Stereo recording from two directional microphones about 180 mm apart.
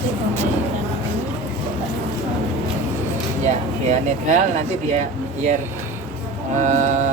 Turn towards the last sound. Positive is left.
turn(degrees=-40)  # may be behind; listen again after turning